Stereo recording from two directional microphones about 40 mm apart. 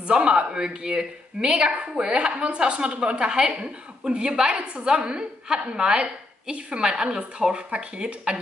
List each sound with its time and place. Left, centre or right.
0.0 s a woman's voice: right